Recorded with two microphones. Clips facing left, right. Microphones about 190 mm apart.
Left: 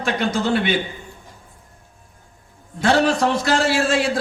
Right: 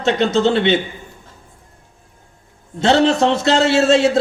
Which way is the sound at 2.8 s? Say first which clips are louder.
Right 3 dB; 25° right (ahead or behind).